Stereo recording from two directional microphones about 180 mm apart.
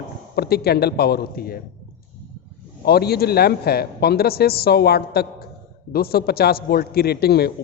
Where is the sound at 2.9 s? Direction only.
60° left (ahead or behind).